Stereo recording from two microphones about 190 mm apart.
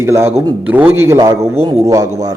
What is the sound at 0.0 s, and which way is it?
A man's voice, 15° right (ahead or behind).